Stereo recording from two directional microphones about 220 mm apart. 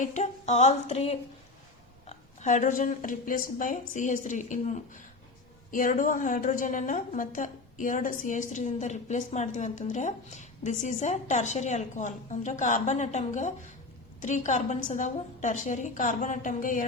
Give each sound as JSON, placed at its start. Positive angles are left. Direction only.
{"t": 0.0, "sound": "a woman's voice", "side_deg": 35}